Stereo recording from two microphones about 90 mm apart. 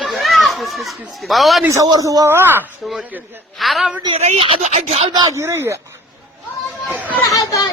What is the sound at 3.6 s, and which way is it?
Speech, centre (ahead or behind).